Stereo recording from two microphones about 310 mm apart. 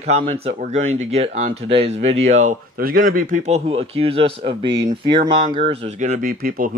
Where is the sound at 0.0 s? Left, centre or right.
Right.